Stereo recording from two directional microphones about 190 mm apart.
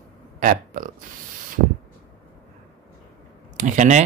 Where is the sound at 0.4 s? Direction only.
45° right (ahead or behind).